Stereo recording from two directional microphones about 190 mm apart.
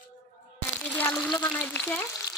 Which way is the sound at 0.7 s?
10° left (ahead or behind).